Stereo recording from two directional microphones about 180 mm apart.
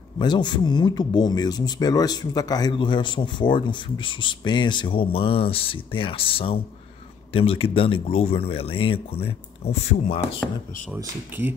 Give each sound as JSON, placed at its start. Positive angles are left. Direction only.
{"t": 0.2, "sound": "speech", "side_deg": 25}
{"t": 11.0, "sound": "speech", "side_deg": -10}